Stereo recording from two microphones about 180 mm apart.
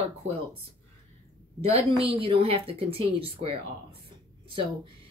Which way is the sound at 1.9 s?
30° right (ahead or behind).